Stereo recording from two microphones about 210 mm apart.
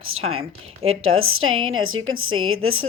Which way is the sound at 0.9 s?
75° right (ahead or behind).